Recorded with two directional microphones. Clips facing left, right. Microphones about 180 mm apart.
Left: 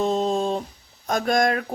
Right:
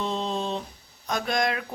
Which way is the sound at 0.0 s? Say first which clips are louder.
Left 7 dB; 45° left (ahead or behind).